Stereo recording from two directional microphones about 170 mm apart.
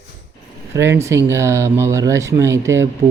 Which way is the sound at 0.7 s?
15° right (ahead or behind).